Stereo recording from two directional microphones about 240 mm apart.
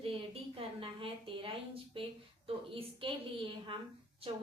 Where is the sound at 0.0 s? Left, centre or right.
Right.